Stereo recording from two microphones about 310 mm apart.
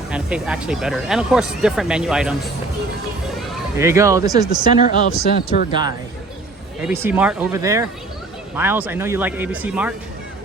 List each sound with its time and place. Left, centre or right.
0.1 s speech: centre
3.5 s speech: centre
4.7 s speech: left
6.8 s speech: centre